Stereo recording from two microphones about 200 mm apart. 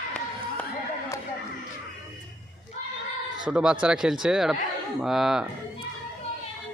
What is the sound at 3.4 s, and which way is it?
Speech, 5° right (ahead or behind).